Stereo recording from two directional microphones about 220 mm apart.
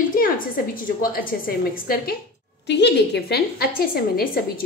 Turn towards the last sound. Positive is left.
turn(degrees=40)  # may be behind; listen again after turning